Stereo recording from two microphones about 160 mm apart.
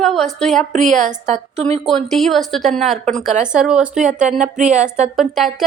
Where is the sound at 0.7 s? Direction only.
50° right (ahead or behind).